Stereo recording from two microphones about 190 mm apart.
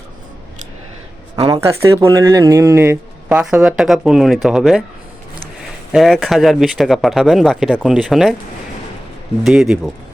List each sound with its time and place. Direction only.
1.5 s speech: 15° right (ahead or behind)
5.9 s speech: centre (ahead or behind)
9.4 s speech: centre (ahead or behind)